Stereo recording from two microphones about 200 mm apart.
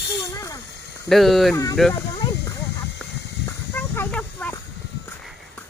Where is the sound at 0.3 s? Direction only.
15° left (ahead or behind).